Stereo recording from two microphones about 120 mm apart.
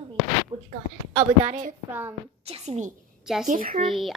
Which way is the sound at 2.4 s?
55° right (ahead or behind).